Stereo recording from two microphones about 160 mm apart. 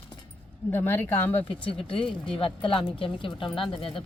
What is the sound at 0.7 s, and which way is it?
Speech, 15° left (ahead or behind).